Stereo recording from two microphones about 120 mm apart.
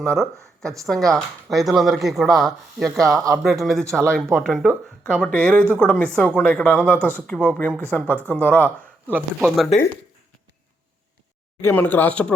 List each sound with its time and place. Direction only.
0.9 s speech: centre (ahead or behind)
9.0 s speech: 15° right (ahead or behind)
11.6 s speech: 15° left (ahead or behind)